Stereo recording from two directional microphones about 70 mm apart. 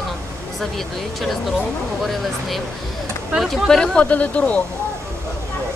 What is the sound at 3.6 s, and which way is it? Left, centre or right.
Speech, centre.